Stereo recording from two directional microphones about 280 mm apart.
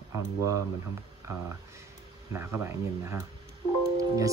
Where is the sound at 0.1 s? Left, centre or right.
Centre.